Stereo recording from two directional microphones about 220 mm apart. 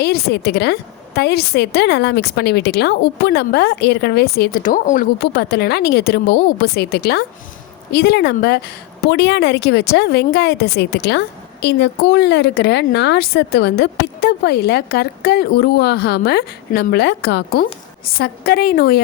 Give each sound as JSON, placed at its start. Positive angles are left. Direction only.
{"t": 0.0, "sound": "a woman's voice", "side_deg": 45}